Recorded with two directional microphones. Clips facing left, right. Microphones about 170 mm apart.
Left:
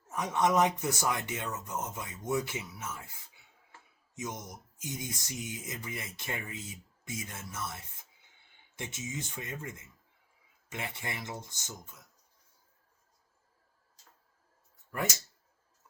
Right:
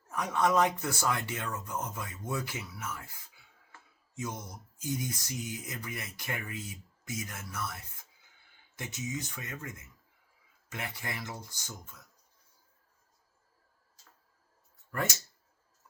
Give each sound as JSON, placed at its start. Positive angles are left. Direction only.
{"t": 0.1, "sound": "speech", "side_deg": 20}